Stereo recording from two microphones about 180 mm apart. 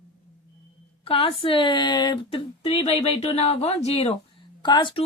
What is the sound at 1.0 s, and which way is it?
Speech, 30° left (ahead or behind).